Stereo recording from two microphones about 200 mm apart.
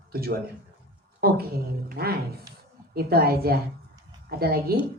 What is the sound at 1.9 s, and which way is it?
A man's voice, 50° right (ahead or behind).